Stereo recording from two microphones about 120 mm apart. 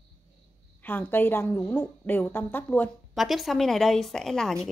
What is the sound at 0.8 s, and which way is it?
Speech, 15° left (ahead or behind).